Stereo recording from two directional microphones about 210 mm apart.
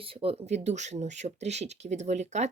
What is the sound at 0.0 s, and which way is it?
Speech, 25° right (ahead or behind).